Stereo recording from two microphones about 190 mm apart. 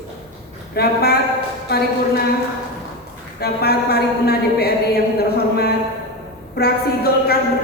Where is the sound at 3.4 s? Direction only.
55° left (ahead or behind).